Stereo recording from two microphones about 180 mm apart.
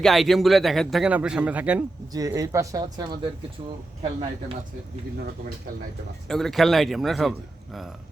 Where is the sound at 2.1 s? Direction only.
20° right (ahead or behind).